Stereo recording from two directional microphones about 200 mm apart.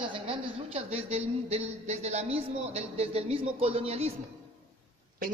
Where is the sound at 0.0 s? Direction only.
25° right (ahead or behind).